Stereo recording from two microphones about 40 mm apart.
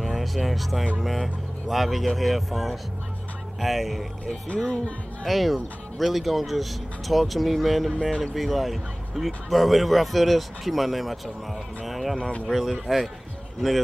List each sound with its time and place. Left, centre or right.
0.0 s speech: centre
5.2 s speech: centre
12.2 s speech: left
12.5 s speech: centre